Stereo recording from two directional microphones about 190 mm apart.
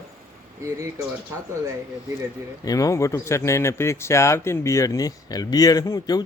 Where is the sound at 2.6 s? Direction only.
20° left (ahead or behind).